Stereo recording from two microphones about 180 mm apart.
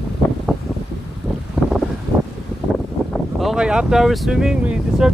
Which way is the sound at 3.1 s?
Centre (ahead or behind).